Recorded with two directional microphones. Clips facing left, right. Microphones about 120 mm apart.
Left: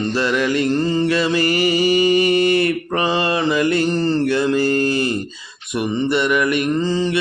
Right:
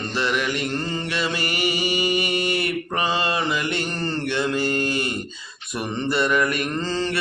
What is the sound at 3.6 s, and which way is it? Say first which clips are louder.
Mantra: left 9 dB; 35° left (ahead or behind).